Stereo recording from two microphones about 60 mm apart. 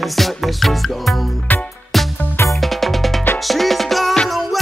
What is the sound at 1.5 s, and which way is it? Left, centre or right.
Music, left.